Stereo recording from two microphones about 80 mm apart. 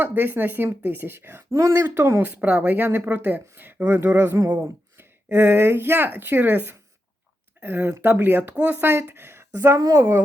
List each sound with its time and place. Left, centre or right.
0.0 s speech: right
2.2 s speech: centre; by 10.2 s right